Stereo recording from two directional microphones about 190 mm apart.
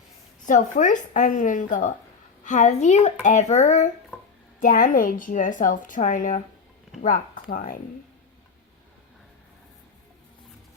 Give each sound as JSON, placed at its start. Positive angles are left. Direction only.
{"t": 0.4, "sound": "a woman's voice", "side_deg": 40}